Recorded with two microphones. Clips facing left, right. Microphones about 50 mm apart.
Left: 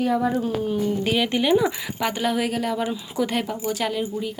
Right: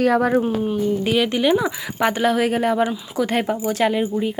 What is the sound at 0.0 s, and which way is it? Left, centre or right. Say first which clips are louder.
Speech: right 5 dB; right.